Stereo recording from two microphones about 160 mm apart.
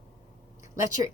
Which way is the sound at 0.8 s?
20° right (ahead or behind).